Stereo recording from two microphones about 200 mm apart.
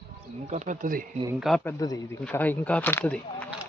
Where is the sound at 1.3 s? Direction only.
Centre (ahead or behind).